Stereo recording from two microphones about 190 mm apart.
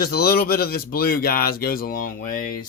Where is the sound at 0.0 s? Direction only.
55° left (ahead or behind).